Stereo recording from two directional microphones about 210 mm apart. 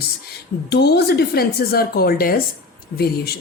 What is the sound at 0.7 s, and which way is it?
A woman's voice, 50° left (ahead or behind).